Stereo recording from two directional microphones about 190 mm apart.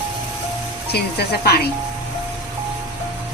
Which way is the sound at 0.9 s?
60° left (ahead or behind).